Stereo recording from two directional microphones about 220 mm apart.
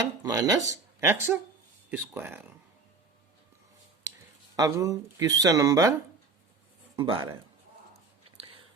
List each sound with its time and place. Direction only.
0.0 s speech: 15° right (ahead or behind)
4.5 s speech: 15° right (ahead or behind)
6.9 s speech: 20° right (ahead or behind)